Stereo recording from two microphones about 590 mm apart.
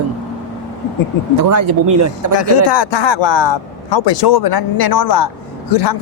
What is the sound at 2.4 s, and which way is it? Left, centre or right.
A man's voice, left.